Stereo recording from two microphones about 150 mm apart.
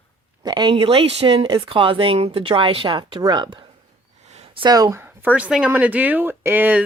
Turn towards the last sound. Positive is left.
turn(degrees=-15)  # may be behind; listen again after turning